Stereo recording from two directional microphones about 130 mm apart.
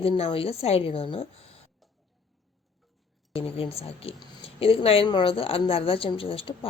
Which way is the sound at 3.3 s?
50° left (ahead or behind).